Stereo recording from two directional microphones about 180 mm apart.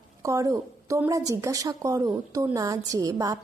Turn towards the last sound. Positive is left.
turn(degrees=-20)  # may be behind; listen again after turning